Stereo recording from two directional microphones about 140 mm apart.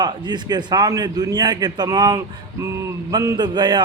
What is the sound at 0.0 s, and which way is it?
A man's voice, 30° right (ahead or behind).